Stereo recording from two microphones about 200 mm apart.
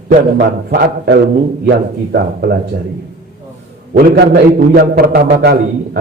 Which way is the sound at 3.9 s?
50° right (ahead or behind).